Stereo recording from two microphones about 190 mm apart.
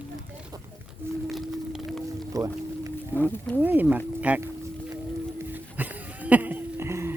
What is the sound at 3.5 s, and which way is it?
Speech, 10° right (ahead or behind).